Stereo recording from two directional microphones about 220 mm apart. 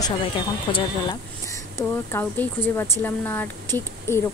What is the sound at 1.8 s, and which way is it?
Speech, 10° left (ahead or behind).